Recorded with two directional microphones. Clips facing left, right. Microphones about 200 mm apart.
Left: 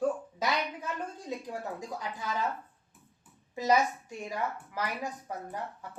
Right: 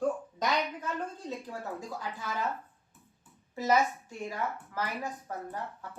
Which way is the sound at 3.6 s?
15° left (ahead or behind).